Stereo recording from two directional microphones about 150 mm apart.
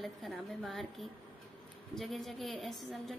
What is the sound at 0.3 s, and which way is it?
A woman's voice, 5° right (ahead or behind).